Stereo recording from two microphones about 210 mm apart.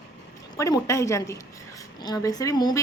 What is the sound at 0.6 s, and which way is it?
Speech, 15° left (ahead or behind).